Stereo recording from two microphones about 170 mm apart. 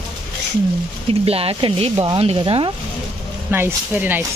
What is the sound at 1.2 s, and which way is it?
Speech, 35° right (ahead or behind).